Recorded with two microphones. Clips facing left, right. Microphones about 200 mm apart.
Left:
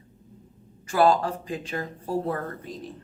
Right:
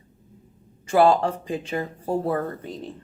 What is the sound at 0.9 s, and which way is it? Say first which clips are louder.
Speech: right 3 dB; 25° right (ahead or behind).